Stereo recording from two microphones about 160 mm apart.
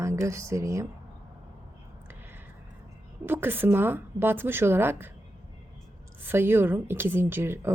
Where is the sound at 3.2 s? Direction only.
15° right (ahead or behind).